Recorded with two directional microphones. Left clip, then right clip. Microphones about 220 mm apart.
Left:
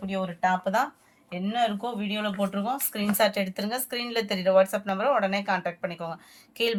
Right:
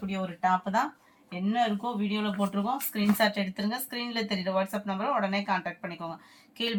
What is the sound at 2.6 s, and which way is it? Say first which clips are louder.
Speech: left 1 dB; 50° left (ahead or behind).